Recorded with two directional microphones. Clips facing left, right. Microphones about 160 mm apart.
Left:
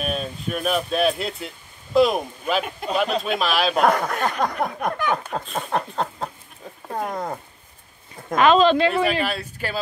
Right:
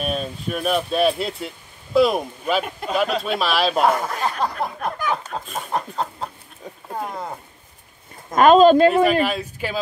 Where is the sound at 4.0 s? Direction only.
60° left (ahead or behind).